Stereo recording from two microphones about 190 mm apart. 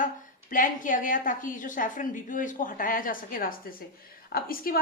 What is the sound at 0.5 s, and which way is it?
Speech, 45° left (ahead or behind).